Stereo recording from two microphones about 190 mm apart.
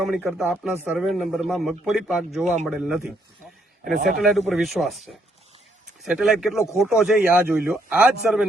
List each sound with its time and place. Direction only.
0.0 s a man's voice: centre (ahead or behind)
3.9 s speech: 50° right (ahead or behind)
4.2 s a man's voice: centre (ahead or behind)